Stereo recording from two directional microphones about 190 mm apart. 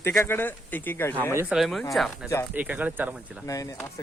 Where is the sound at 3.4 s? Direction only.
15° left (ahead or behind).